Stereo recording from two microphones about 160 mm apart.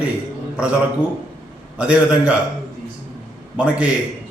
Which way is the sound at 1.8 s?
5° right (ahead or behind).